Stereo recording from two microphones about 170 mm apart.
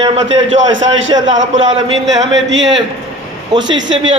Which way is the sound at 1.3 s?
45° right (ahead or behind).